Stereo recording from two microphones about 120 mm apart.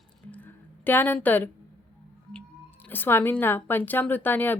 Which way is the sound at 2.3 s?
15° left (ahead or behind).